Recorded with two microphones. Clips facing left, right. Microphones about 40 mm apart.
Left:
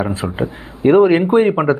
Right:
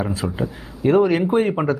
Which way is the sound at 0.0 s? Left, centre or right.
Left.